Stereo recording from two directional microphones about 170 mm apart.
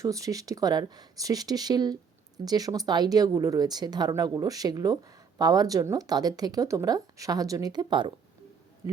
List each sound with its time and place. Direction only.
0.0 s speech: 20° right (ahead or behind)